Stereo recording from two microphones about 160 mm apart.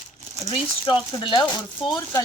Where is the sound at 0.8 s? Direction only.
30° left (ahead or behind).